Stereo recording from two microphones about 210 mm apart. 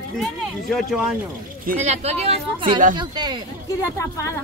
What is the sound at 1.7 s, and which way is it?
A woman's voice, 30° right (ahead or behind).